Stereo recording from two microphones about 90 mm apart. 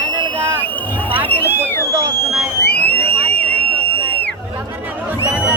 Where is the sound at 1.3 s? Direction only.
20° left (ahead or behind).